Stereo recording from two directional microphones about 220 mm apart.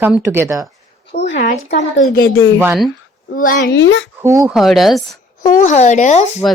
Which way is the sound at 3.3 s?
40° left (ahead or behind).